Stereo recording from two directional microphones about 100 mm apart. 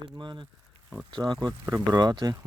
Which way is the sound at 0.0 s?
50° right (ahead or behind).